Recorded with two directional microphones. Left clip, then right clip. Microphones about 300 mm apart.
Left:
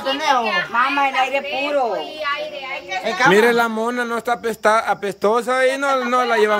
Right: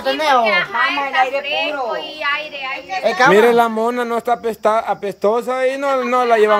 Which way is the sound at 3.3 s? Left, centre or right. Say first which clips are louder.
Right 2 dB; centre.